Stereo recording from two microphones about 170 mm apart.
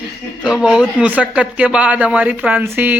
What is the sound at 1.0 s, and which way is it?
Speech, 10° right (ahead or behind).